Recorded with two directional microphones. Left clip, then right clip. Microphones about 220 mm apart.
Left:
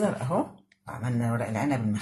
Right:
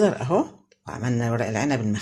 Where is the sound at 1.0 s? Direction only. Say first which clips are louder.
Right 5 dB; 35° right (ahead or behind).